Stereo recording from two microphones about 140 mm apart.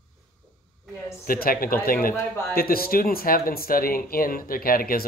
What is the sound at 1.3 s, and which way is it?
Speech, 90° left.